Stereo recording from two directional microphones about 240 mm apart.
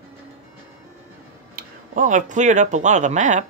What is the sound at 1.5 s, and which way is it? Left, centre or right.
Speech, right.